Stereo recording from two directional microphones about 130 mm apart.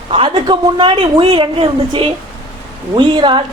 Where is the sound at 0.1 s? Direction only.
40° right (ahead or behind).